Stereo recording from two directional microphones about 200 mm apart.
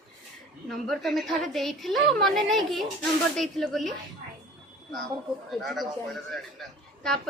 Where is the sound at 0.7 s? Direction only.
Centre (ahead or behind).